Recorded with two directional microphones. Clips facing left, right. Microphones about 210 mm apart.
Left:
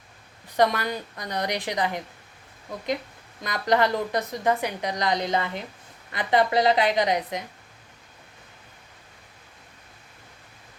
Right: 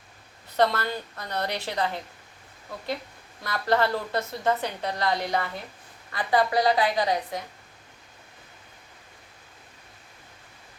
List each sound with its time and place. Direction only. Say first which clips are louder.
0.4 s a woman's voice: left 1 dB; 15° left (ahead or behind)
3.4 s a woman's voice: left 2 dB; 15° left (ahead or behind)